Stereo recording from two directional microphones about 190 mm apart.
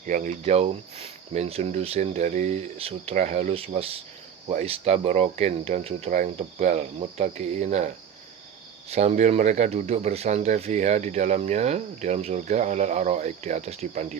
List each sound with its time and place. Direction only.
0.0 s speech: 45° right (ahead or behind)
8.9 s speech: 35° right (ahead or behind)